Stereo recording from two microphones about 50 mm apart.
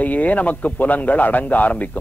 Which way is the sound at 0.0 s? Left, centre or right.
Left.